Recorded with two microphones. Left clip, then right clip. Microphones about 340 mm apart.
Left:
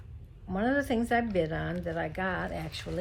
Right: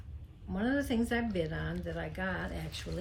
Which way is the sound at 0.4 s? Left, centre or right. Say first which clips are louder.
Left 5 dB; centre.